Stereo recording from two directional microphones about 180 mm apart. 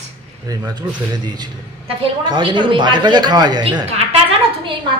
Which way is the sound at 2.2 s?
25° right (ahead or behind).